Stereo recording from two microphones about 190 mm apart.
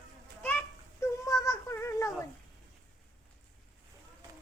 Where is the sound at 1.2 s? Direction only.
15° left (ahead or behind).